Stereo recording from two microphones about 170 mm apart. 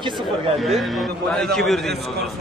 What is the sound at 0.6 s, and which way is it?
Speech, centre (ahead or behind).